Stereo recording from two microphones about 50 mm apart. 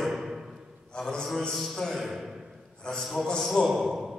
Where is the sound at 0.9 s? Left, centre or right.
Centre.